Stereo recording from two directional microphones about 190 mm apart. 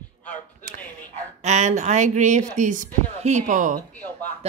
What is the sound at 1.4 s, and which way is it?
A woman's voice, 35° right (ahead or behind).